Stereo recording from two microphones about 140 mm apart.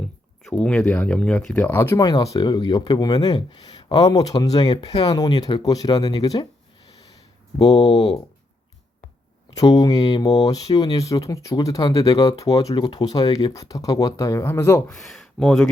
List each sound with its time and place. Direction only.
0.0 s speech: 5° left (ahead or behind); by 6.5 s 25° left (ahead or behind)
9.5 s speech: 25° left (ahead or behind)
14.9 s speech: centre (ahead or behind)